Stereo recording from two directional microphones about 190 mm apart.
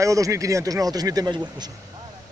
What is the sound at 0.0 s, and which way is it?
Speech, 15° right (ahead or behind).